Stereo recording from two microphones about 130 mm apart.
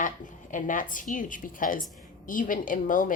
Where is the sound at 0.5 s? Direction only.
90° left.